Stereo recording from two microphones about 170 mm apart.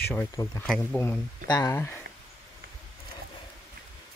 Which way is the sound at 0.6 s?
Centre (ahead or behind).